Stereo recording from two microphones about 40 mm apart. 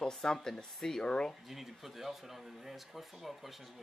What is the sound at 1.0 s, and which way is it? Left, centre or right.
Speech, left.